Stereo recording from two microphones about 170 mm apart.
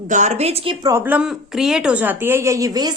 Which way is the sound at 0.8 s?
15° right (ahead or behind).